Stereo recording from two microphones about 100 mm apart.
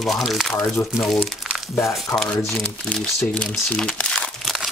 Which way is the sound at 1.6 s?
Centre (ahead or behind).